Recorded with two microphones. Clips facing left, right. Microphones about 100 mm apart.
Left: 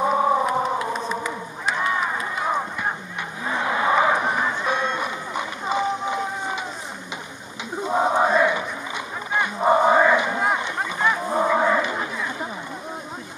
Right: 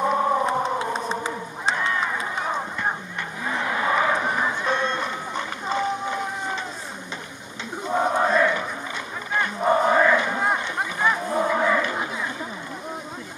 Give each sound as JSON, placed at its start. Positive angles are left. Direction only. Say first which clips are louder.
{"t": 0.0, "sound": "a sound", "louder": "left 2 dB", "side_deg": 5}
{"t": 0.5, "sound": "crowd", "louder": "left 1 dB", "side_deg": -30}
{"t": 3.4, "sound": "a sound", "louder": "left 3 dB", "side_deg": 20}
{"t": 4.4, "sound": "run", "louder": "even", "side_deg": 10}
{"t": 7.9, "sound": "crowd", "louder": "left 2 dB", "side_deg": 15}
{"t": 11.1, "sound": "cattle", "louder": "left 2 dB", "side_deg": 15}